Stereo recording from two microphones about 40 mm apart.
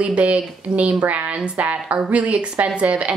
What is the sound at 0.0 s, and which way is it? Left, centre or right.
A woman's voice, right.